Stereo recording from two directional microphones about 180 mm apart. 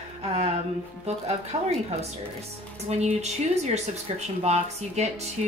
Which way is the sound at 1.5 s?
35° right (ahead or behind).